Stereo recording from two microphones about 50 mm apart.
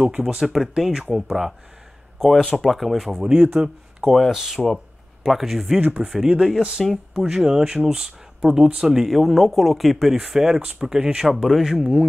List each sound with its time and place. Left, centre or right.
0.0 s speech: centre
0.4 s speech: centre
2.1 s speech: centre
3.3 s speech: right
4.0 s speech: centre
5.8 s speech: right
6.4 s speech: centre
6.8 s speech: centre
7.2 s speech: centre
11.2 s speech: centre